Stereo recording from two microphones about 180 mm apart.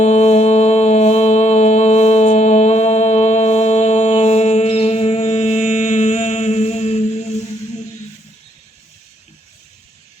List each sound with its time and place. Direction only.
0.0 s music: 40° left (ahead or behind)